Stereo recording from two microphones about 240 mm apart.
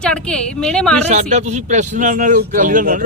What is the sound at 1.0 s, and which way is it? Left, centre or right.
Speech, right.